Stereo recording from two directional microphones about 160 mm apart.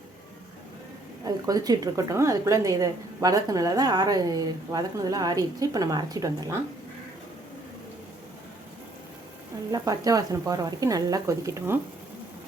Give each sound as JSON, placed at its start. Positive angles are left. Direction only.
{"t": 1.2, "sound": "a woman's voice", "side_deg": -25}
{"t": 9.7, "sound": "a woman's voice", "side_deg": -25}